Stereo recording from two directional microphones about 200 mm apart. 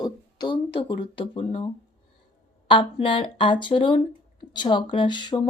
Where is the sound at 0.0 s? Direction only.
20° left (ahead or behind).